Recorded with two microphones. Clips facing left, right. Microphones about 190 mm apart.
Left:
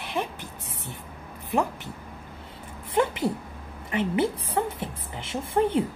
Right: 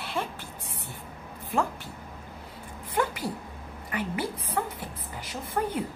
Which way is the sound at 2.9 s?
25° left (ahead or behind).